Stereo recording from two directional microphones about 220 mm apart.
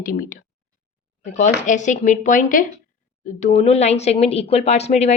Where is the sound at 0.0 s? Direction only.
40° left (ahead or behind).